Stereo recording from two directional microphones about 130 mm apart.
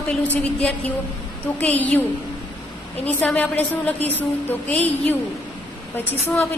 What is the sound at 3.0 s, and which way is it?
A woman's voice, 15° left (ahead or behind).